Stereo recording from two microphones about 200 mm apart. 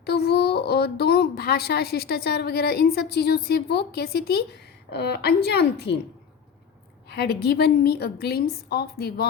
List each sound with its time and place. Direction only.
0.0 s a woman's voice: 55° left (ahead or behind)
7.1 s a woman's voice: 50° left (ahead or behind)